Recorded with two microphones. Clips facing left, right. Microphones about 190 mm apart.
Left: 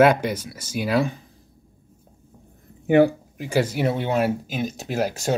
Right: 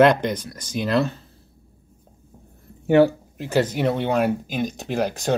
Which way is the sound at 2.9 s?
15° left (ahead or behind).